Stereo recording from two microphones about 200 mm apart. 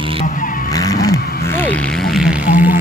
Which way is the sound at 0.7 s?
15° left (ahead or behind).